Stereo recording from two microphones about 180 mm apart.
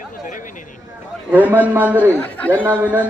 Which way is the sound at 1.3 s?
10° right (ahead or behind).